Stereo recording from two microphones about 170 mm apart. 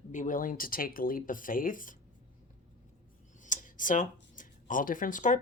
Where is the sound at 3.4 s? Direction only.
50° left (ahead or behind).